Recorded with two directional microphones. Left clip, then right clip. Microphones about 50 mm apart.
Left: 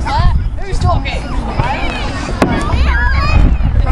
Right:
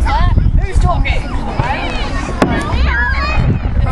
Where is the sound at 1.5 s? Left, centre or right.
Right.